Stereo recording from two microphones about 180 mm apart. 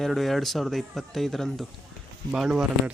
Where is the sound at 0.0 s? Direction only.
Centre (ahead or behind).